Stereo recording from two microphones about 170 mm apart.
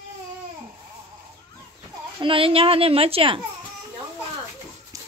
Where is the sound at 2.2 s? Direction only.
30° right (ahead or behind).